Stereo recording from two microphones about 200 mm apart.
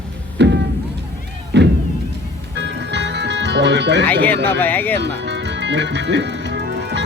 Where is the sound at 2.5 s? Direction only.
60° right (ahead or behind).